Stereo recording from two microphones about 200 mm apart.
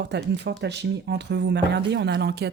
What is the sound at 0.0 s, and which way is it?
A woman's voice, 60° right (ahead or behind).